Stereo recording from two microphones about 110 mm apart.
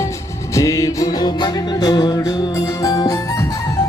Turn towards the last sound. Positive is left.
turn(degrees=35)  # may be behind; listen again after turning